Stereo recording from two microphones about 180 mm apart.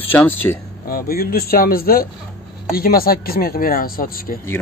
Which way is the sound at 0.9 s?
55° left (ahead or behind).